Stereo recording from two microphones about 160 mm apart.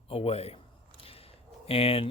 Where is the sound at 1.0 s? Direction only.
35° left (ahead or behind).